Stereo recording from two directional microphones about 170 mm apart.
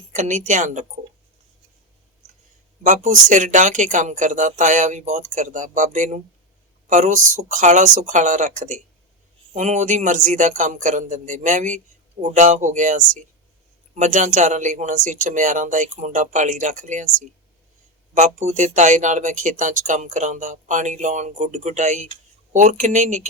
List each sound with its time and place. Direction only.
0.1 s speech: 45° right (ahead or behind)
2.8 s speech: 45° right (ahead or behind)